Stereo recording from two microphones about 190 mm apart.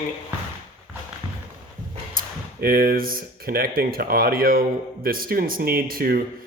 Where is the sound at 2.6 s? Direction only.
50° right (ahead or behind).